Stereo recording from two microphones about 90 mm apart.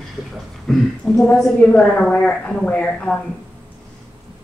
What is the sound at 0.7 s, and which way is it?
A woman's voice, 5° left (ahead or behind).